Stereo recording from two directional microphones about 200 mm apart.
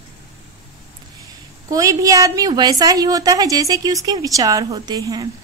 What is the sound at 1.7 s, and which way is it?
A woman's voice, 15° right (ahead or behind).